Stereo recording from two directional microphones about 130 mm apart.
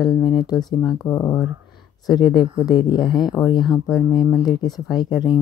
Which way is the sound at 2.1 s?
35° left (ahead or behind).